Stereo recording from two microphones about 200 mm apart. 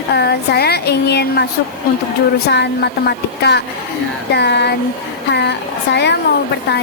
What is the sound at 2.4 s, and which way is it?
Speech, 55° left (ahead or behind).